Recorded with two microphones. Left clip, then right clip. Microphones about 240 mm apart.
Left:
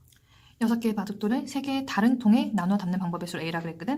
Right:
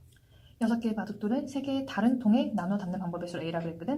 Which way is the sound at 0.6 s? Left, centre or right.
Left.